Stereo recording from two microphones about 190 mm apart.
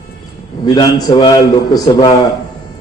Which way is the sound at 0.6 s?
20° left (ahead or behind).